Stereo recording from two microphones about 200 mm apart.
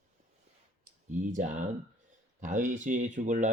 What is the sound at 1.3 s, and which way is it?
Speech, 40° right (ahead or behind).